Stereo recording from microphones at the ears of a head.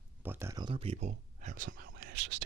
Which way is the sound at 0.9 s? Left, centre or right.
Right.